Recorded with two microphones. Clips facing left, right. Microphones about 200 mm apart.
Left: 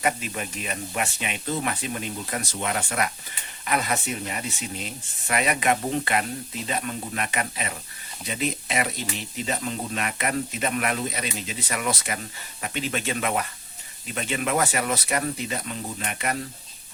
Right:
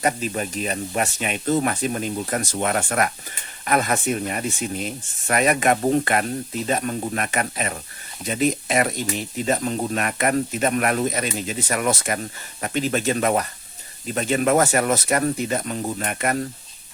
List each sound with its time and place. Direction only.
0.0 s speech: 40° right (ahead or behind)